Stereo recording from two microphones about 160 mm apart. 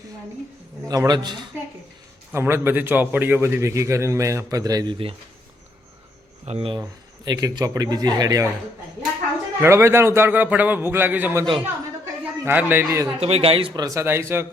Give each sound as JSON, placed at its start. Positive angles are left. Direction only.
{"t": 0.9, "sound": "a man's voice", "side_deg": -25}
{"t": 2.3, "sound": "a man's voice", "side_deg": -15}
{"t": 6.4, "sound": "speech", "side_deg": -40}
{"t": 7.3, "sound": "a man's voice", "side_deg": -25}
{"t": 9.6, "sound": "a man's voice", "side_deg": -15}
{"t": 13.1, "sound": "a man's voice", "side_deg": -40}